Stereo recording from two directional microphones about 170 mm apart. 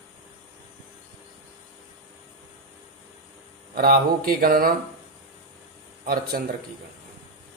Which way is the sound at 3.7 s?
60° right (ahead or behind).